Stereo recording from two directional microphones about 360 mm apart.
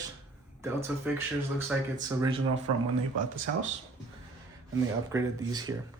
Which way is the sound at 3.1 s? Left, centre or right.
Right.